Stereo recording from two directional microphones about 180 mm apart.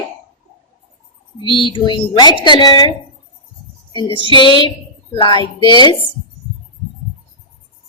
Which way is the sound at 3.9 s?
25° left (ahead or behind).